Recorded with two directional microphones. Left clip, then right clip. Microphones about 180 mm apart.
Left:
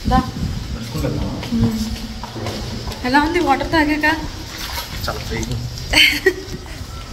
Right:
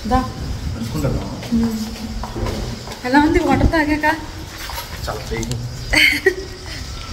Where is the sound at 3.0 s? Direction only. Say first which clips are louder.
Right 1 dB; 15° right (ahead or behind).